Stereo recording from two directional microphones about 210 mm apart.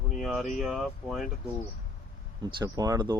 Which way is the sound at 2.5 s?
20° right (ahead or behind).